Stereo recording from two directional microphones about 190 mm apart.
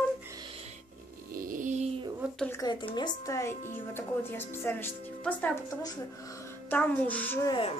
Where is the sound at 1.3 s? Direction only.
45° right (ahead or behind).